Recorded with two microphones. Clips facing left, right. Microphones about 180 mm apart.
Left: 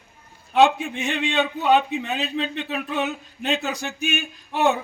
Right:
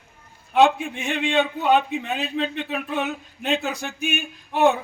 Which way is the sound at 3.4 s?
55° right (ahead or behind).